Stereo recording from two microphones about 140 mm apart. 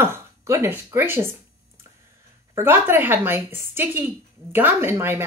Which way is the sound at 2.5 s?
15° right (ahead or behind).